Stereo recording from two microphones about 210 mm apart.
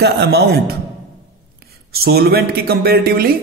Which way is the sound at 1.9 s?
45° right (ahead or behind).